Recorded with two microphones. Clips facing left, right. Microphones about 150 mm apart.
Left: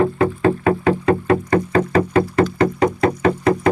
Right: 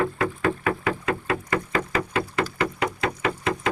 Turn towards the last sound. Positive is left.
turn(degrees=40)  # may be behind; listen again after turning